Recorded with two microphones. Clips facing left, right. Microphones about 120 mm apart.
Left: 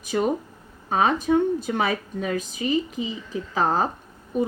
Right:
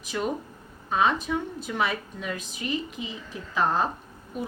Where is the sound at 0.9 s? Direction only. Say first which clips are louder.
Left 2 dB; 45° left (ahead or behind).